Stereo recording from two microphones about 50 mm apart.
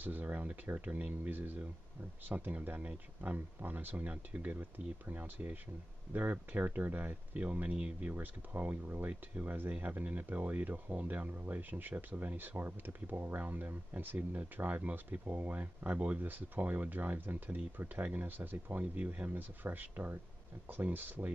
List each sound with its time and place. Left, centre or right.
0.0 s speech: right